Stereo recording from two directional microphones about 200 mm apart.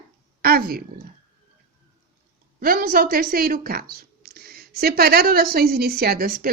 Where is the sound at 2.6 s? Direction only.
45° right (ahead or behind).